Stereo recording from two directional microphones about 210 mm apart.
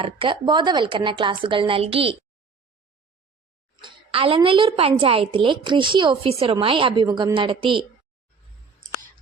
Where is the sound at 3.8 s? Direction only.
25° right (ahead or behind).